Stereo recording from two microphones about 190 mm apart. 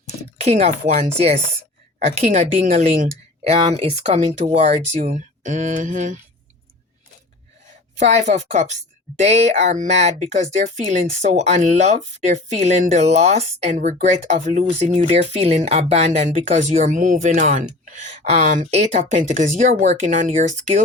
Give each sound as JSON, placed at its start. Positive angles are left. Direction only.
{"t": 0.3, "sound": "a woman's voice", "side_deg": -35}
{"t": 2.3, "sound": "a woman's voice", "side_deg": -35}
{"t": 7.9, "sound": "a woman's voice", "side_deg": -35}